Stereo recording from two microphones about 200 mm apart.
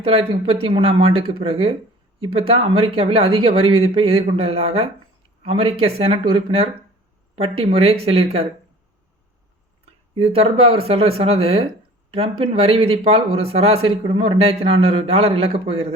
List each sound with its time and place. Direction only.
0.0 s speech: 30° right (ahead or behind)
3.6 s speech: 90° right
3.9 s speech: 30° right (ahead or behind)
10.2 s speech: 30° right (ahead or behind)